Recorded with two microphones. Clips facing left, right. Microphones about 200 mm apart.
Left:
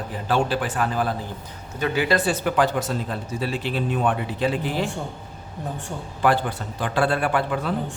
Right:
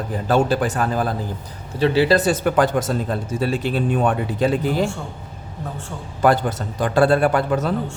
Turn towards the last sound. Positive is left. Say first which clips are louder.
# right 5 dB
turn(degrees=-40)  # may be behind; listen again after turning